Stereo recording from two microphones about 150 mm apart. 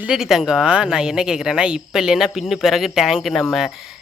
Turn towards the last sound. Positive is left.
turn(degrees=0)  # may be behind; listen again after turning